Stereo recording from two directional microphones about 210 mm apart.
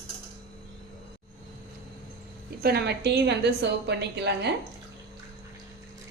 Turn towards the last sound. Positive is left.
turn(degrees=-55)  # may be behind; listen again after turning